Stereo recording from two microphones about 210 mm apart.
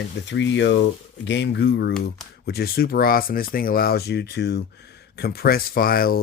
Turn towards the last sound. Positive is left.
turn(degrees=45)  # may be behind; listen again after turning